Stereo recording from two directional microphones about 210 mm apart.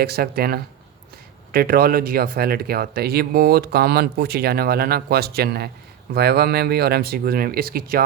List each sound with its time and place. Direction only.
0.0 s speech: 45° right (ahead or behind)